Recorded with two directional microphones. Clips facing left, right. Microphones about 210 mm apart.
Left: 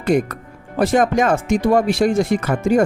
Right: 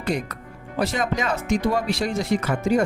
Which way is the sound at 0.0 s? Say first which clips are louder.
Left 9 dB; 50° left (ahead or behind).